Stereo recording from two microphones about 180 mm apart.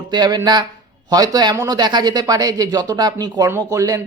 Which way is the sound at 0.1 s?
25° right (ahead or behind).